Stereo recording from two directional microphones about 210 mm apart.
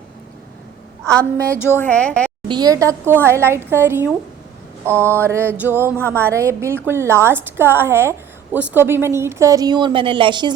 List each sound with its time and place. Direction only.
1.5 s a woman's voice: 10° left (ahead or behind)
2.5 s a woman's voice: 20° right (ahead or behind)